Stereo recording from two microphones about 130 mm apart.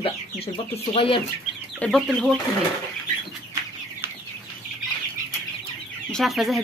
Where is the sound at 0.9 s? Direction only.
45° left (ahead or behind).